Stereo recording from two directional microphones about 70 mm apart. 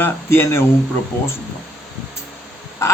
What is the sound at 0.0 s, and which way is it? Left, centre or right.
Speech, left.